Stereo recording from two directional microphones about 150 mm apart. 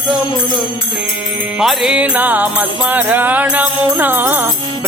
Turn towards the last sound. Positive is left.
turn(degrees=-15)  # may be behind; listen again after turning